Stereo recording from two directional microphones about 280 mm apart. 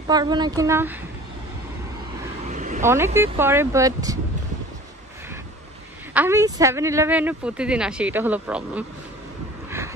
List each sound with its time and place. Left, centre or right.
0.0 s speech: centre
2.4 s vehicle: right
3.2 s speech: centre
6.1 s speech: centre